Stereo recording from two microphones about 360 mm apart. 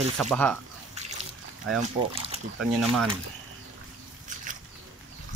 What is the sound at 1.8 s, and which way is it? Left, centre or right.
Speech, centre.